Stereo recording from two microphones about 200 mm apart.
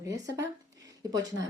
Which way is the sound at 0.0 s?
15° right (ahead or behind).